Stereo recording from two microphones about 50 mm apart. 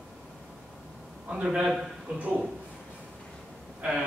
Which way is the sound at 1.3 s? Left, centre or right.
Right.